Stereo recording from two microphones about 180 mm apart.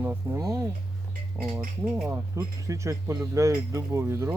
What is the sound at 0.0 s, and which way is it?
Speech, 15° right (ahead or behind).